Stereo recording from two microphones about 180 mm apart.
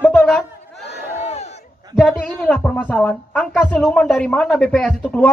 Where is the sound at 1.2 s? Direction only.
40° left (ahead or behind).